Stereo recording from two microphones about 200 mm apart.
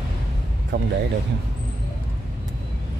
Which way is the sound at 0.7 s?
50° right (ahead or behind).